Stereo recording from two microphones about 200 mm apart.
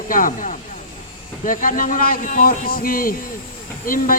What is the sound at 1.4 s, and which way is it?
Speech, 40° left (ahead or behind).